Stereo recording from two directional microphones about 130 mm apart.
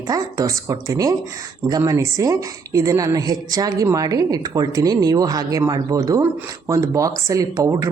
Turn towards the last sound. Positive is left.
turn(degrees=-25)  # may be behind; listen again after turning